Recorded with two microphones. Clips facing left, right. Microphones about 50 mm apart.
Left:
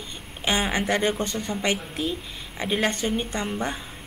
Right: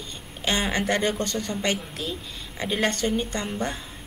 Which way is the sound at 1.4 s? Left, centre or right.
Centre.